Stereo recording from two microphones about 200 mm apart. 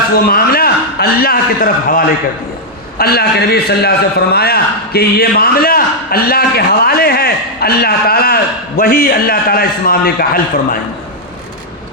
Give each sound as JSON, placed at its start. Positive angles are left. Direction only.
{"t": 0.3, "sound": "a man's voice", "side_deg": 50}